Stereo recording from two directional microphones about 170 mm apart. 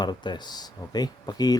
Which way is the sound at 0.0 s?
25° left (ahead or behind).